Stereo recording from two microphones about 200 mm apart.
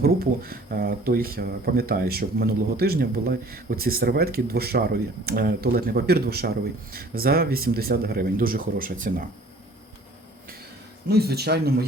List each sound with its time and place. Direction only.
0.0 s speech: 50° right (ahead or behind)
11.1 s speech: 50° right (ahead or behind)